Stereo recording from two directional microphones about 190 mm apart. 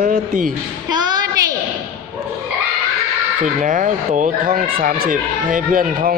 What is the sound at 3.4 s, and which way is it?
Speech, 40° right (ahead or behind).